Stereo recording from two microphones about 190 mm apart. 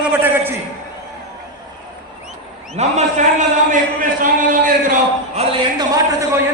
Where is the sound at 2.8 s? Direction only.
40° right (ahead or behind).